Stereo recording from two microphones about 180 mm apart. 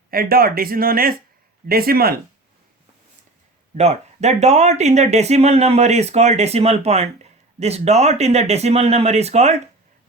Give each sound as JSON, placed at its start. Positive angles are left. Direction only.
{"t": 0.1, "sound": "speech", "side_deg": -55}
{"t": 3.8, "sound": "speech", "side_deg": -40}